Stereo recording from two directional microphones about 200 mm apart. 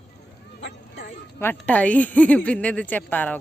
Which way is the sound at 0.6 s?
55° left (ahead or behind).